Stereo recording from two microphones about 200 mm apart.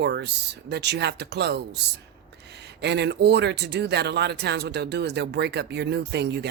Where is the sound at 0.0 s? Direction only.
60° right (ahead or behind).